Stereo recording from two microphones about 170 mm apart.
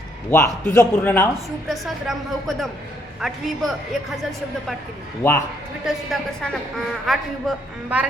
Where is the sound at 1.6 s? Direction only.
Centre (ahead or behind).